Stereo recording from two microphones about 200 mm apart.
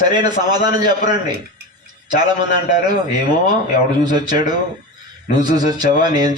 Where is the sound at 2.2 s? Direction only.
20° right (ahead or behind).